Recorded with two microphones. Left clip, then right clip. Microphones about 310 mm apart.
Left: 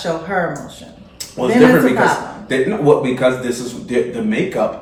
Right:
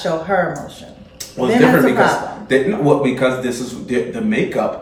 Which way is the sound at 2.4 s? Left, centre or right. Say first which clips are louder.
Left 1 dB; centre.